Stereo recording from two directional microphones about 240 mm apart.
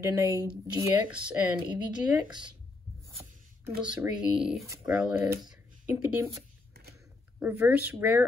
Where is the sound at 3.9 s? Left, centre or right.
Centre.